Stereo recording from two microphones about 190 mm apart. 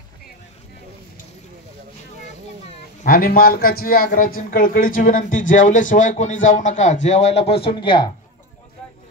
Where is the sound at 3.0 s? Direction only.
50° left (ahead or behind); by 8.0 s 25° left (ahead or behind).